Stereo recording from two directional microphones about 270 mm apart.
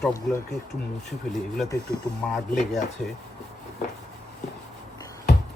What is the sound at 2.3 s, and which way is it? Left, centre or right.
Speech, centre.